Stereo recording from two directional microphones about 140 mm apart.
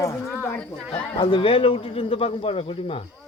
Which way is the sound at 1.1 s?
40° left (ahead or behind).